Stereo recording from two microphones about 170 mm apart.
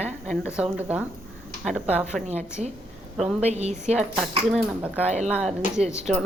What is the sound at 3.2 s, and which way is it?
Speech, 5° right (ahead or behind).